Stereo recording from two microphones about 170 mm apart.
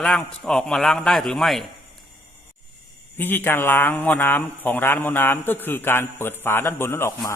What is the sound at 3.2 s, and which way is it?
Speech, 10° left (ahead or behind).